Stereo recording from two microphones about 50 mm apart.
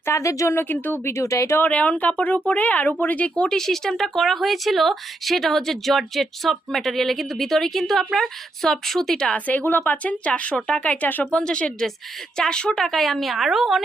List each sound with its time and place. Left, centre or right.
0.1 s speech: left
0.5 s speech: left
1.0 s speech: left
1.6 s speech: left
3.6 s speech: centre
9.5 s speech: left
11.3 s speech: left
12.8 s speech: centre